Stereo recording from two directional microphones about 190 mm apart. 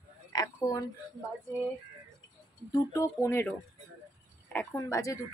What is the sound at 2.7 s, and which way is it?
A woman's voice, 15° left (ahead or behind).